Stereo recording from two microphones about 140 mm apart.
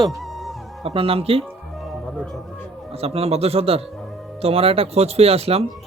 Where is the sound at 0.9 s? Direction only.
45° right (ahead or behind).